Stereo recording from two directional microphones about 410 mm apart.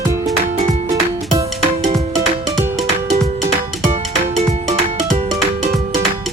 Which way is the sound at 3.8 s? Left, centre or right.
Centre.